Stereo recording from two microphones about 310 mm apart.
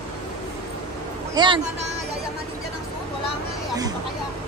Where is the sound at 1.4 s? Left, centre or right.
Centre.